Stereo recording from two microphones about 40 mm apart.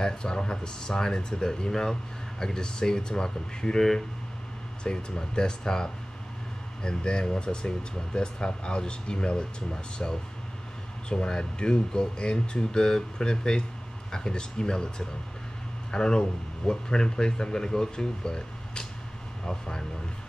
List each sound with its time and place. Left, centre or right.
0.0 s speech: left
4.8 s speech: centre